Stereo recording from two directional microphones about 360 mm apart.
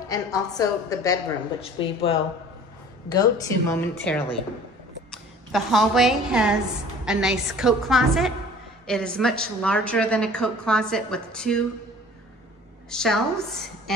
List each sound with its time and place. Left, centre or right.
0.1 s a woman's voice: centre
12.9 s a woman's voice: centre